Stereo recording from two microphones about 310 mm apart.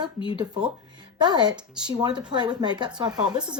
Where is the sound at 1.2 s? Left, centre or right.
Centre.